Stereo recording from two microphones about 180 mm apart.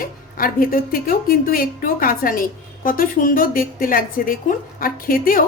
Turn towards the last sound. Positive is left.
turn(degrees=50)  # may be behind; listen again after turning